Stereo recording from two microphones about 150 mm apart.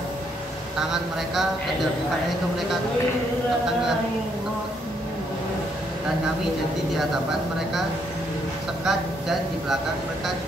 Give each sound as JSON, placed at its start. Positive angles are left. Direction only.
{"t": 8.8, "sound": "speech", "side_deg": 0}